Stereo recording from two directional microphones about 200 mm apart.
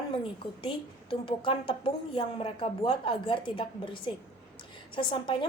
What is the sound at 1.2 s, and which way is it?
Speech, 25° left (ahead or behind).